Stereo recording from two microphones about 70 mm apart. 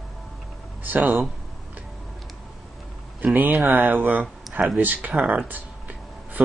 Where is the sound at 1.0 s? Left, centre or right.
Centre.